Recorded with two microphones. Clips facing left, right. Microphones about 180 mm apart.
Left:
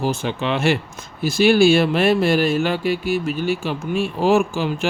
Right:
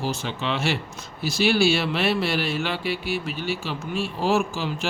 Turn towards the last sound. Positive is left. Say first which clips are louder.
# left 6 dB
turn(degrees=55)  # may be behind; listen again after turning